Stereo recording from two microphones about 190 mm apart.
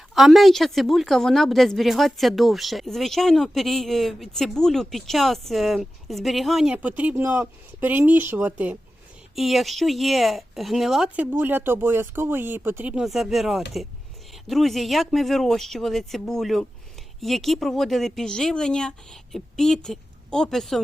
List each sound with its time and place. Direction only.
0.1 s speech: centre (ahead or behind)